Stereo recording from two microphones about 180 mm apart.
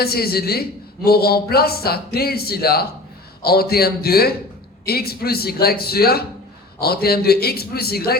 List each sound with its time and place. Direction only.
0.0 s a man's voice: 60° left (ahead or behind)